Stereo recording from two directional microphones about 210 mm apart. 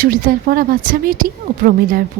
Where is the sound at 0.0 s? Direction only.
40° right (ahead or behind).